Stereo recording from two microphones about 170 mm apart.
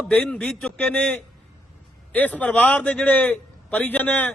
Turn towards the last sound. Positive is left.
turn(degrees=10)  # may be behind; listen again after turning